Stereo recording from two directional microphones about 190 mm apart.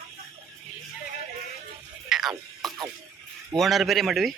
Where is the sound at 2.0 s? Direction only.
Centre (ahead or behind).